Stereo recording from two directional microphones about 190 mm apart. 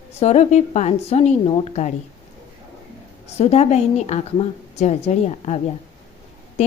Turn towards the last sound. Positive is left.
turn(degrees=35)  # may be behind; listen again after turning